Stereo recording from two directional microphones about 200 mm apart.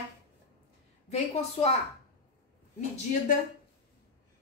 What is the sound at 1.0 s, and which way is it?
Speech, 30° left (ahead or behind).